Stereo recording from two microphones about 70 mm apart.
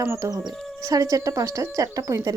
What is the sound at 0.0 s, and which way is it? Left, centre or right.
Speech, right.